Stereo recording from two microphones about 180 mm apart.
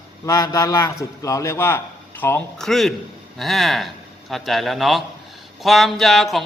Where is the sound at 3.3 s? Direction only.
Centre (ahead or behind).